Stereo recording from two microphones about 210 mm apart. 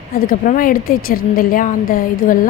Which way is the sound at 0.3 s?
40° left (ahead or behind).